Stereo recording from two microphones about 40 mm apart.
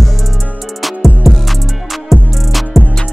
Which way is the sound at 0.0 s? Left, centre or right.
Centre.